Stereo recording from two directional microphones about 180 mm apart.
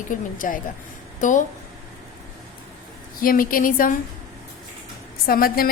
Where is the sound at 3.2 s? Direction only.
50° left (ahead or behind).